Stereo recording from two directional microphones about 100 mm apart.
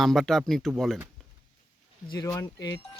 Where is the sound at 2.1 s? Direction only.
45° left (ahead or behind).